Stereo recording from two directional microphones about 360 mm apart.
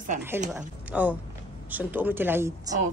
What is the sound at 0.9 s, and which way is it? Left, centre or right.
Speech, centre.